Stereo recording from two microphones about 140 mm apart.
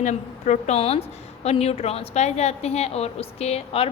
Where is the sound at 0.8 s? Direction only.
45° left (ahead or behind).